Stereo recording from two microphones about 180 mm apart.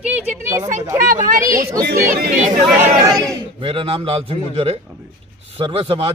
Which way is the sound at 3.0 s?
20° right (ahead or behind).